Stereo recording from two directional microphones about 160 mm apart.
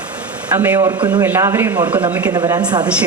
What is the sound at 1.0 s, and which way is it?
Speech, 25° right (ahead or behind).